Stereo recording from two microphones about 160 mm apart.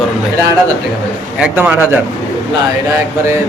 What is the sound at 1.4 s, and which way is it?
Speech, 10° right (ahead or behind).